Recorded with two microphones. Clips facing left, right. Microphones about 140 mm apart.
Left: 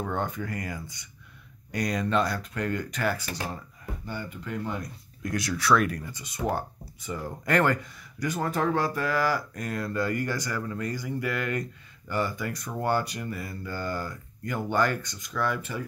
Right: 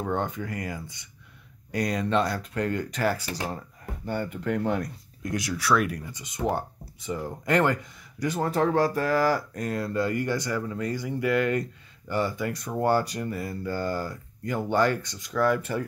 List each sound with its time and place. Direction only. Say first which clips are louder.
0.0 s speech: right 2 dB; 20° right (ahead or behind)
3.5 s speech: right 1 dB; 50° right (ahead or behind); by 4.8 s 65° right (ahead or behind)
5.2 s speech: even; 15° right (ahead or behind); by 15.8 s 45° right (ahead or behind)